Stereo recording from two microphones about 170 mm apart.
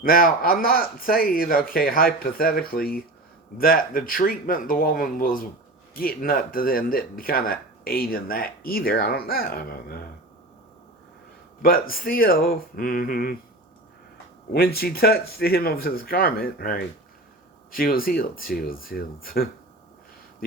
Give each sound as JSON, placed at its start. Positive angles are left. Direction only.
{"t": 0.0, "sound": "speech", "side_deg": 60}
{"t": 11.6, "sound": "speech", "side_deg": 60}
{"t": 14.5, "sound": "speech", "side_deg": 65}